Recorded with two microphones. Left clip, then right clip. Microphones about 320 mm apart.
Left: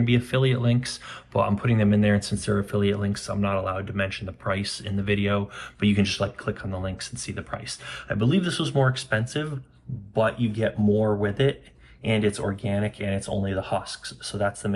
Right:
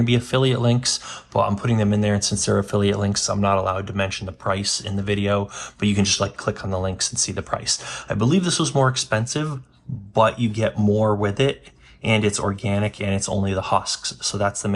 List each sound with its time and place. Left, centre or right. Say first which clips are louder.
0.0 s speech: right 4 dB; centre